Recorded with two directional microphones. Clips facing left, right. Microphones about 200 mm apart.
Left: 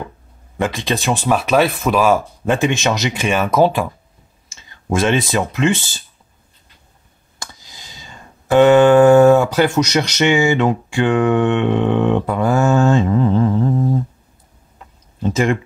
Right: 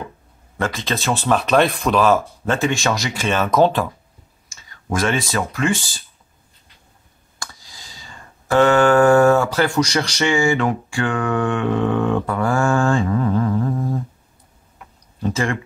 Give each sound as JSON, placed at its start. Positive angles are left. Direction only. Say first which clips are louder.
{"t": 0.6, "sound": "speech", "louder": "left 3 dB", "side_deg": 15}
{"t": 4.5, "sound": "speech", "louder": "left 4 dB", "side_deg": 25}
{"t": 7.3, "sound": "music", "louder": "left 1 dB", "side_deg": 20}
{"t": 14.8, "sound": "tick-tock", "louder": "left 1 dB", "side_deg": 20}